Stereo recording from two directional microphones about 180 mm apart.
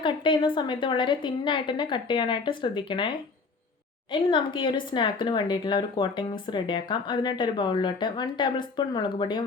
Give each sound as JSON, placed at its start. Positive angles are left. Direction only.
{"t": 0.0, "sound": "speech", "side_deg": 25}
{"t": 4.1, "sound": "speech", "side_deg": 25}